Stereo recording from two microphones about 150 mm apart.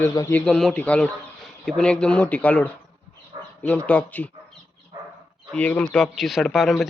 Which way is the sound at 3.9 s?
10° left (ahead or behind).